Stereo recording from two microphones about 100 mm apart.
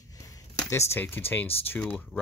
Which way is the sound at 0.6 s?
25° left (ahead or behind).